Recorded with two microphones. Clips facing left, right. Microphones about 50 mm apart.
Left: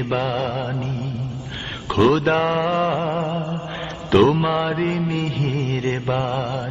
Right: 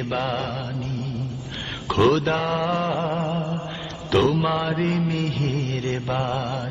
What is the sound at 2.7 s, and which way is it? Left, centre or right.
Mantra, centre.